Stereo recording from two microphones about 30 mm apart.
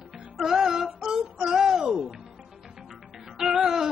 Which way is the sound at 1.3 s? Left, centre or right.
Right.